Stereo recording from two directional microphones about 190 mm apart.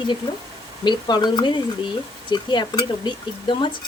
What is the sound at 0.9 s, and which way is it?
Speech, 20° left (ahead or behind).